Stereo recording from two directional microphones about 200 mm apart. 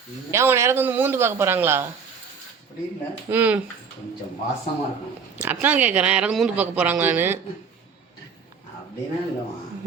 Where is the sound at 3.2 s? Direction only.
10° right (ahead or behind).